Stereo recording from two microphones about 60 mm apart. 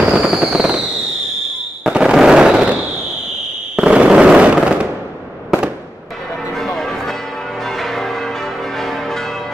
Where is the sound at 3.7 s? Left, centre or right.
Centre.